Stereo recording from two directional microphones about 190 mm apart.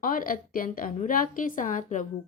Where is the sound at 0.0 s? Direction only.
45° left (ahead or behind).